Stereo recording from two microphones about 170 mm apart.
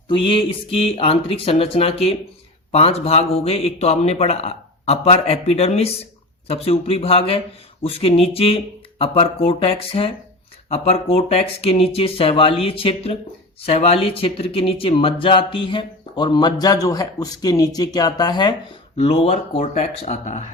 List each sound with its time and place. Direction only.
0.1 s speech: 30° left (ahead or behind)
18.9 s speech: 35° left (ahead or behind)